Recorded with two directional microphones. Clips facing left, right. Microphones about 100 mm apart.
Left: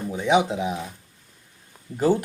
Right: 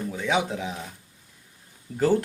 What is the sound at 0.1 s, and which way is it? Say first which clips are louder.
Speech: left 6 dB; 20° left (ahead or behind).